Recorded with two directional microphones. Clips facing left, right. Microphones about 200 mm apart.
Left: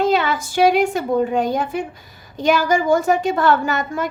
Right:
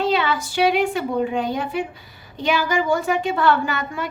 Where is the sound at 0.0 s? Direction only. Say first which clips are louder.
Left 3 dB; 45° left (ahead or behind).